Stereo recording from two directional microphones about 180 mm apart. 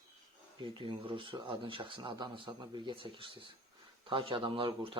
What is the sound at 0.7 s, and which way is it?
Speech, 25° right (ahead or behind).